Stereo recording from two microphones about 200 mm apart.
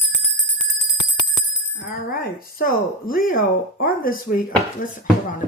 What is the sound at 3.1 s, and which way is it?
Speech, 45° left (ahead or behind).